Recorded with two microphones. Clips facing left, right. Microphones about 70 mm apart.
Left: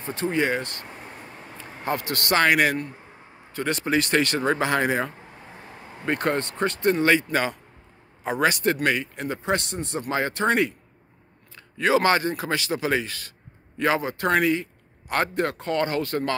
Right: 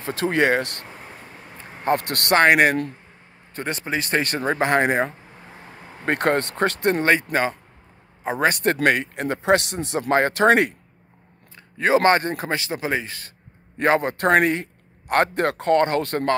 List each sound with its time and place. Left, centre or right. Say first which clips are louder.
0.0 s speech: right 4 dB; right
2.0 s a man's voice: right 2 dB; right
2.4 s speech: right 5 dB; right
3.5 s speech: left 3 dB; right
6.0 s a man's voice: right 4 dB; right
7.0 s speech: even; right
8.2 s a man's voice: right 1 dB; right
8.5 s speech: right 4 dB; right
11.5 s speech: right 2 dB; right
12.4 s speech: even; right
13.7 s a man's voice: right 4 dB; right